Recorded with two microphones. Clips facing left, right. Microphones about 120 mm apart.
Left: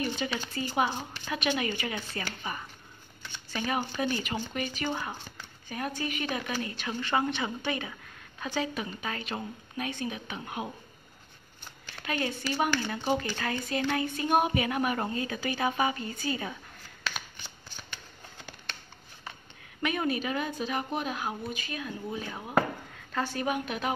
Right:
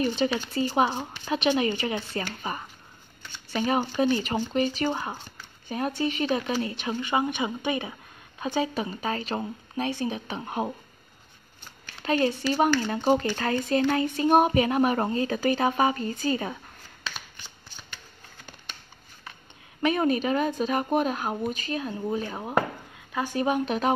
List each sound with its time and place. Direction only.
0.0 s speech: 35° right (ahead or behind)
12.0 s a woman's voice: 35° right (ahead or behind)
19.8 s speech: 35° right (ahead or behind)
23.1 s a woman's voice: 15° right (ahead or behind)
23.4 s speech: 30° right (ahead or behind)